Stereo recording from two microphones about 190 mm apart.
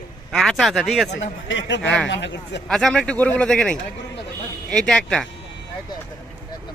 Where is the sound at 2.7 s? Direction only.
5° left (ahead or behind).